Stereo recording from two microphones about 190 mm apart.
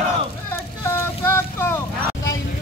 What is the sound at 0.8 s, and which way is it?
Boat, 10° left (ahead or behind).